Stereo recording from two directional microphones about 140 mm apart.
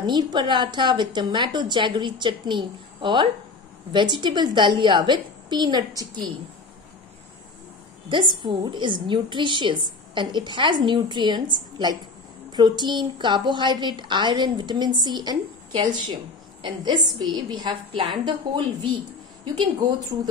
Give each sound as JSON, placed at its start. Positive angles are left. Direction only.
{"t": 0.0, "sound": "a woman's voice", "side_deg": -30}
{"t": 8.1, "sound": "a woman's voice", "side_deg": -35}